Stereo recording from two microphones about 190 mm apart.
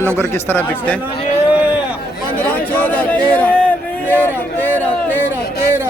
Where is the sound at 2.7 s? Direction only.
5° left (ahead or behind).